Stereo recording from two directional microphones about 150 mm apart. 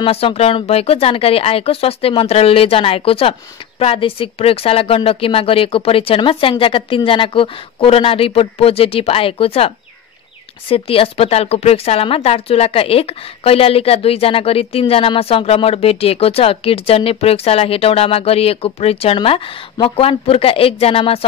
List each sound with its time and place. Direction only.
0.0 s a woman's voice: 40° left (ahead or behind)
10.7 s a woman's voice: 40° left (ahead or behind)